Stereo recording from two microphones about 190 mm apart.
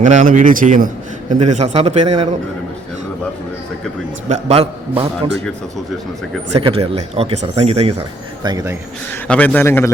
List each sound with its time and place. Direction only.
0.0 s a man's voice: 40° right (ahead or behind)
4.3 s speech: 35° right (ahead or behind)
6.5 s speech: 30° right (ahead or behind)
8.4 s speech: 20° right (ahead or behind)
9.2 s a man's voice: 5° left (ahead or behind)